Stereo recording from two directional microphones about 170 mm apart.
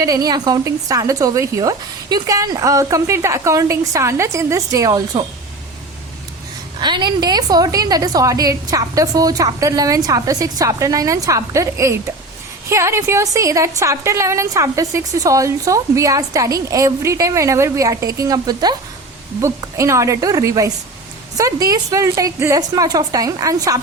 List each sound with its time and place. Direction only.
0.0 s a woman's voice: 20° right (ahead or behind)
6.7 s a woman's voice: 25° right (ahead or behind)